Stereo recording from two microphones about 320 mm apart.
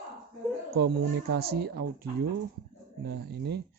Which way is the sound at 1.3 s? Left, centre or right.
Right.